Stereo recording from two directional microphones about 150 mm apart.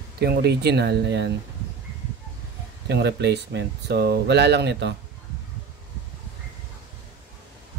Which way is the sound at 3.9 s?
90° right.